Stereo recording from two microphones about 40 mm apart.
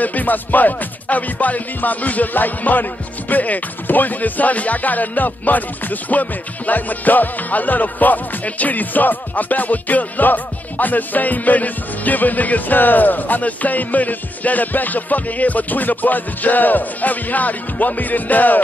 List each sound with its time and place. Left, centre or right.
0.0 s music: left